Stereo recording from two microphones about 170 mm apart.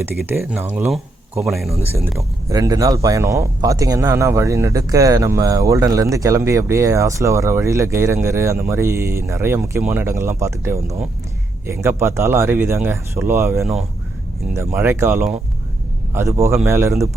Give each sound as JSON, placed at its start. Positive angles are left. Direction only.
{"t": 0.3, "sound": "speech", "side_deg": -10}
{"t": 2.5, "sound": "speech", "side_deg": -20}